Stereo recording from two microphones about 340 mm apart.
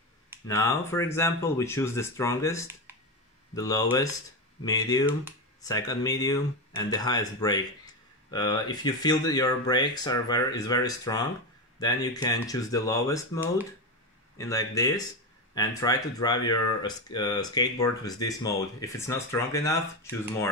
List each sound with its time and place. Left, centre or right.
0.5 s speech: centre
14.4 s speech: centre